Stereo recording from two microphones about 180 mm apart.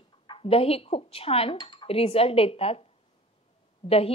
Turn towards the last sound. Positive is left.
turn(degrees=35)  # may be behind; listen again after turning